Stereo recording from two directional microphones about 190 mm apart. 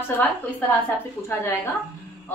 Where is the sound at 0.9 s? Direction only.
15° left (ahead or behind).